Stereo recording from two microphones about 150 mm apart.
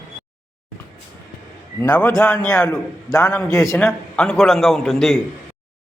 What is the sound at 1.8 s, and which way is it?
Speech, 10° left (ahead or behind).